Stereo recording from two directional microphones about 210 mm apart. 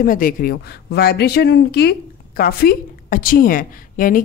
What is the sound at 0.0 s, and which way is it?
Speech, 40° left (ahead or behind).